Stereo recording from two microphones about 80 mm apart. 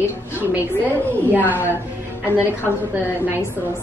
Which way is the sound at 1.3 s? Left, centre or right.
Right.